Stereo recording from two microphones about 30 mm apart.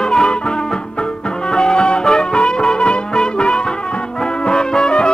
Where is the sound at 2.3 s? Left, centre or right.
Left.